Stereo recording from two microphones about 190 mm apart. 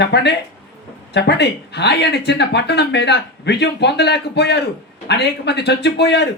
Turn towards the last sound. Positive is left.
turn(degrees=60)  # may be behind; listen again after turning